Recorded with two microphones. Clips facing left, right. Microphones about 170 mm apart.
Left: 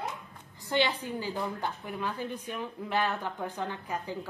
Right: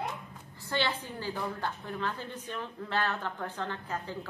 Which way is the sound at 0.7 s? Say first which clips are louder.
Left 4 dB; 15° left (ahead or behind).